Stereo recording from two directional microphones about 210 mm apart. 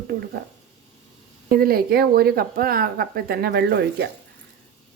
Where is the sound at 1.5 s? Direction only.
45° right (ahead or behind).